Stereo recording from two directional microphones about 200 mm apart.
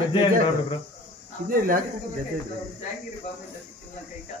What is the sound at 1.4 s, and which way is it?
Speech, 45° right (ahead or behind).